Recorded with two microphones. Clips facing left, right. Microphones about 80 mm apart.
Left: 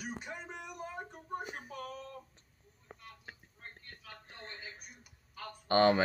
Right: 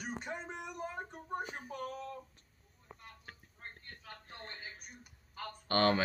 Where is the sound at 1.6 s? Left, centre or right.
Right.